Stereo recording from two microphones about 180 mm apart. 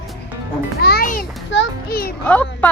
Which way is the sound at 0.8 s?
60° left (ahead or behind).